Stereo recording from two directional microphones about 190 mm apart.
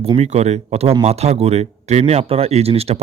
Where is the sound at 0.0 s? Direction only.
35° right (ahead or behind).